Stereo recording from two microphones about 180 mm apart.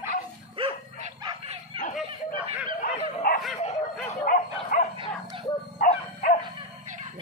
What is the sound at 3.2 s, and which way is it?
Dog, 55° left (ahead or behind).